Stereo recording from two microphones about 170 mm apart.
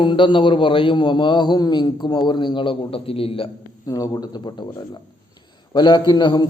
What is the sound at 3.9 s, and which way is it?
A man's voice, 20° left (ahead or behind).